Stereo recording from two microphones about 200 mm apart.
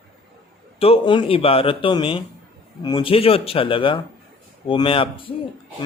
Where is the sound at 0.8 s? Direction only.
25° left (ahead or behind).